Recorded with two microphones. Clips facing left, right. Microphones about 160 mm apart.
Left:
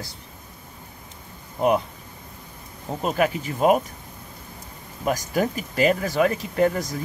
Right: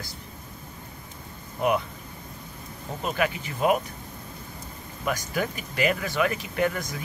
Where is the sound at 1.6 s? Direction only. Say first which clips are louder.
Left 4 dB; 40° left (ahead or behind).